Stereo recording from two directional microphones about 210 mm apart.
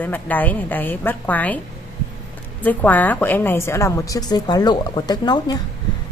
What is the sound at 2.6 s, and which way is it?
A woman's voice, 10° left (ahead or behind).